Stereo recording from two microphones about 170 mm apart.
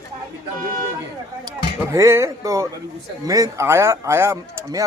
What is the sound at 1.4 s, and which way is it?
Speech, 15° right (ahead or behind).